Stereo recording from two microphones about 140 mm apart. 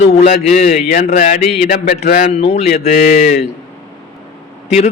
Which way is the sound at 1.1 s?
75° left (ahead or behind).